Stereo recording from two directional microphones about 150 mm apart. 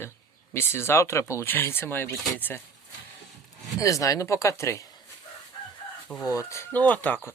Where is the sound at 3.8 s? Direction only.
20° left (ahead or behind).